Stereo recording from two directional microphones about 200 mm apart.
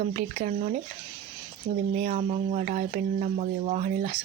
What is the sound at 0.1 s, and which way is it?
Speech, 40° right (ahead or behind).